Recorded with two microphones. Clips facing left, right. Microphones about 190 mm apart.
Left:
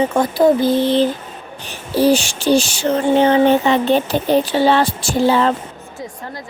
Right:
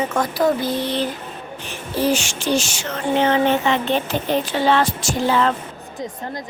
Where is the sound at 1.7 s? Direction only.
35° left (ahead or behind).